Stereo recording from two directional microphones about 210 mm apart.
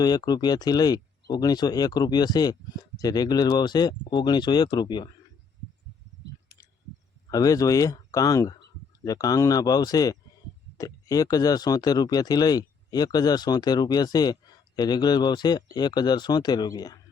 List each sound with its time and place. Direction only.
0.0 s speech: 20° left (ahead or behind)
7.3 s speech: 15° left (ahead or behind)